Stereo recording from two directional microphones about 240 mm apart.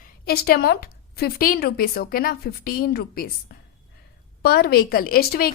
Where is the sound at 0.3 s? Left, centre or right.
Left.